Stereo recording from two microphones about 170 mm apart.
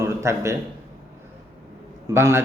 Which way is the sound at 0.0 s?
15° right (ahead or behind).